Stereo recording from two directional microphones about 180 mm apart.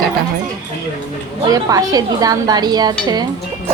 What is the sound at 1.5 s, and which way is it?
Speech, 20° right (ahead or behind).